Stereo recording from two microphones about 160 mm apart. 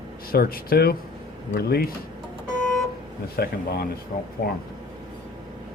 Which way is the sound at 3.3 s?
75° left (ahead or behind).